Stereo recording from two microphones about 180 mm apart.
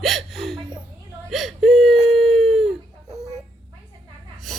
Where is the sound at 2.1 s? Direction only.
Centre (ahead or behind).